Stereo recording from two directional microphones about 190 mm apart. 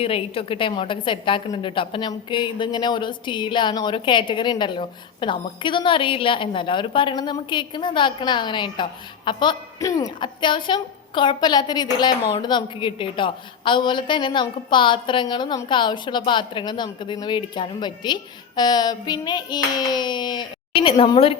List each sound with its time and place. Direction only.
0.0 s a woman's voice: 30° left (ahead or behind)